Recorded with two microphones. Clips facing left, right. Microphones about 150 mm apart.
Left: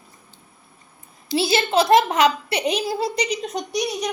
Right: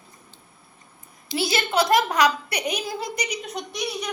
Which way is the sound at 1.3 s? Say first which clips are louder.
Left 4 dB; 25° left (ahead or behind).